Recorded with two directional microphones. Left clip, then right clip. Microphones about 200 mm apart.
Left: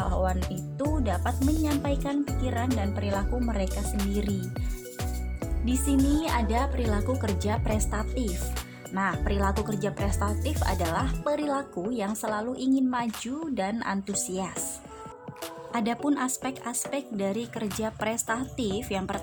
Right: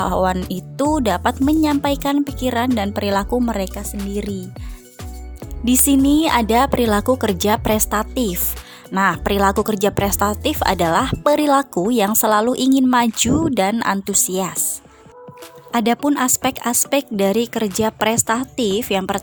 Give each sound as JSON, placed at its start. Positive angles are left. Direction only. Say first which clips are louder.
{"t": 0.0, "sound": "music", "louder": "right 11 dB", "side_deg": -50}
{"t": 0.8, "sound": "speech", "louder": "right 12 dB", "side_deg": -50}
{"t": 5.6, "sound": "speech", "louder": "right 11 dB", "side_deg": -45}
{"t": 15.7, "sound": "speech", "louder": "right 11 dB", "side_deg": -35}